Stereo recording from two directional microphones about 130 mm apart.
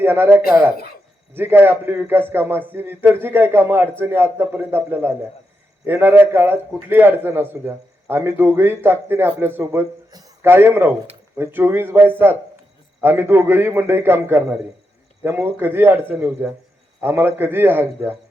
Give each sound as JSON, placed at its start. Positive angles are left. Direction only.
{"t": 0.0, "sound": "a man's voice", "side_deg": -15}
{"t": 10.1, "sound": "a sound", "side_deg": -30}
{"t": 10.4, "sound": "a man's voice", "side_deg": -15}